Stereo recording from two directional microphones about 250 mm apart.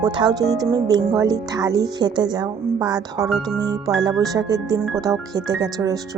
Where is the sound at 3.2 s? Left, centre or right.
Centre.